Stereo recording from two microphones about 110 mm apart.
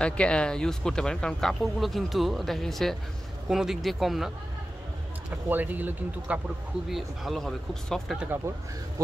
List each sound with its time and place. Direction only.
0.0 s speech: 10° left (ahead or behind)
5.5 s speech: 15° right (ahead or behind)
6.9 s speech: centre (ahead or behind)